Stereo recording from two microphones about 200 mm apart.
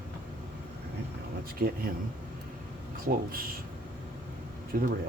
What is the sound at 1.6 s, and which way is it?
Speech, 50° right (ahead or behind).